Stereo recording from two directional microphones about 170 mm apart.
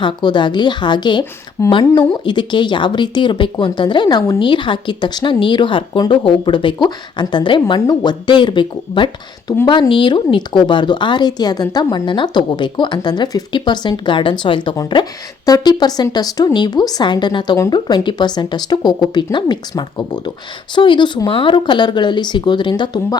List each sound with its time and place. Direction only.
0.0 s a woman's voice: 25° left (ahead or behind)